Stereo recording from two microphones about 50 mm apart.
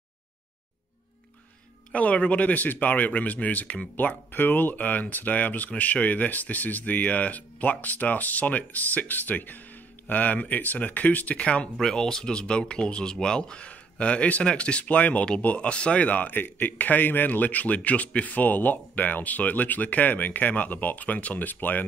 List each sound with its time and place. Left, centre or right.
1.9 s a man's voice: left
11.7 s a man's voice: centre; by 21.8 s left